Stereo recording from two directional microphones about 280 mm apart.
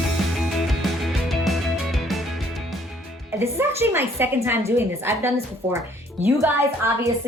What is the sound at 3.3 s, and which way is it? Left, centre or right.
A woman's voice, centre.